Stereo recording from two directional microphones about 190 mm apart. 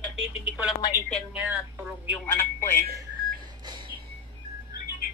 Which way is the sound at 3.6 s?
25° right (ahead or behind).